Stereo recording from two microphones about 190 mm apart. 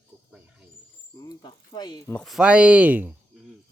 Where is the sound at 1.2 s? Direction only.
20° left (ahead or behind).